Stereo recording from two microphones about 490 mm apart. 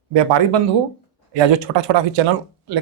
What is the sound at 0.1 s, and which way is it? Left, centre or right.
Speech, right.